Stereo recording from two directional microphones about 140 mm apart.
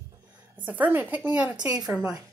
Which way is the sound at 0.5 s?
10° right (ahead or behind).